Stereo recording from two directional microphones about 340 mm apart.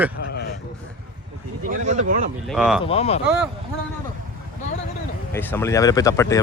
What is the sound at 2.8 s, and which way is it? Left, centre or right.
Speech, centre.